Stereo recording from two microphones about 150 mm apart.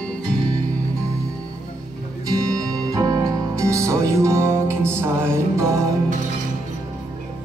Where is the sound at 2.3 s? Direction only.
25° right (ahead or behind).